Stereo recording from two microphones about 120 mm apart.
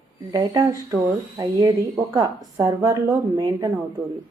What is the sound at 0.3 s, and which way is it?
A woman's voice, 30° right (ahead or behind).